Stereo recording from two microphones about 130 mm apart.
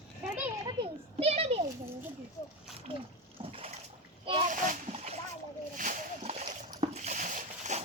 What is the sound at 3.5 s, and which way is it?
Splash, 45° right (ahead or behind).